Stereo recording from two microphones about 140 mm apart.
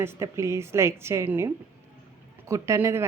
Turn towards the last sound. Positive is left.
turn(degrees=-20)  # may be behind; listen again after turning